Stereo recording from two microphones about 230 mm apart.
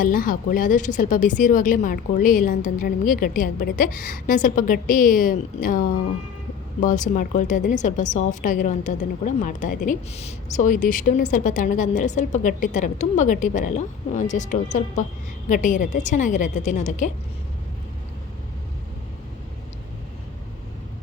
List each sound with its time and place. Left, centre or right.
0.0 s a woman's voice: left